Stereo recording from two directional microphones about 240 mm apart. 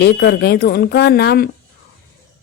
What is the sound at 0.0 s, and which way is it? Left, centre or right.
Speech, left.